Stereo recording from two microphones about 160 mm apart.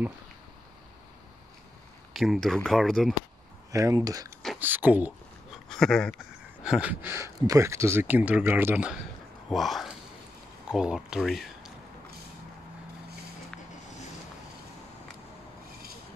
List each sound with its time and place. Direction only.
2.1 s speech: centre (ahead or behind)
3.7 s speech: 20° right (ahead or behind)
4.6 s a sound: 10° right (ahead or behind)
5.7 s speech: 5° left (ahead or behind)
9.5 s speech: centre (ahead or behind)